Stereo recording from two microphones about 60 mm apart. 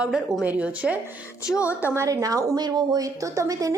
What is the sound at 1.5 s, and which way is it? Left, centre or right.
Speech, left.